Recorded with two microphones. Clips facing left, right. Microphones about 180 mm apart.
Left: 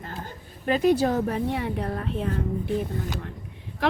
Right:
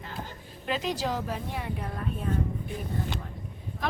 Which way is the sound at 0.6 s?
50° left (ahead or behind).